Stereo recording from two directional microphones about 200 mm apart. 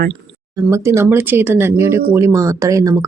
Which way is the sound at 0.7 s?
15° right (ahead or behind).